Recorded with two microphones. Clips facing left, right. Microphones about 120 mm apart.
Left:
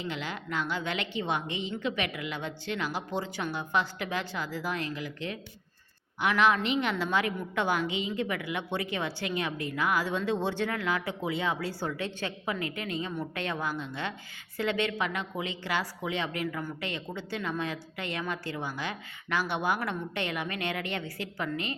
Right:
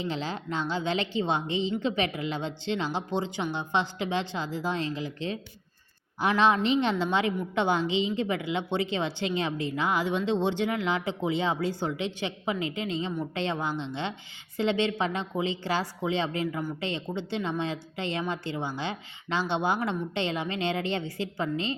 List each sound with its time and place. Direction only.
0.0 s a woman's voice: 30° right (ahead or behind)